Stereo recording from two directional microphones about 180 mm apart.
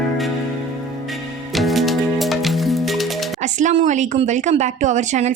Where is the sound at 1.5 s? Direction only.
Centre (ahead or behind).